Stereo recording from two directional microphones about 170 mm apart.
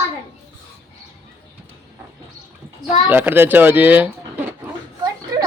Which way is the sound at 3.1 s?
10° right (ahead or behind).